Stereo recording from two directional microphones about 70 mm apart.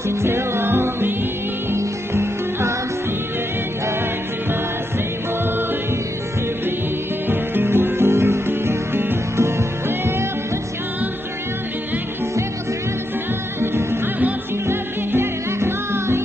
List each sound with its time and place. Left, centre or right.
0.1 s music: right
7.2 s music: right
13.6 s music: right